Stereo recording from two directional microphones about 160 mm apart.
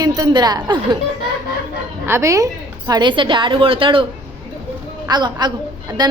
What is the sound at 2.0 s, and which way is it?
A woman's voice, 15° right (ahead or behind).